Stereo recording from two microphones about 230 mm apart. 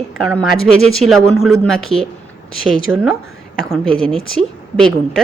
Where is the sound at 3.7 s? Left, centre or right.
Centre.